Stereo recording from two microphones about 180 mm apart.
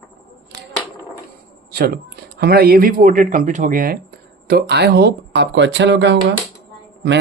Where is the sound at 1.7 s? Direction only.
60° right (ahead or behind).